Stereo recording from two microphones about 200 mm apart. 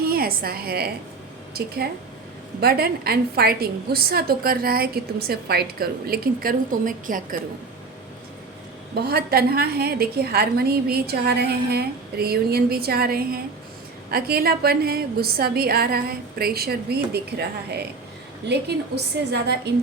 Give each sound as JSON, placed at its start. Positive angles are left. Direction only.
{"t": 0.0, "sound": "a woman's voice", "side_deg": -50}
{"t": 9.0, "sound": "a woman's voice", "side_deg": -50}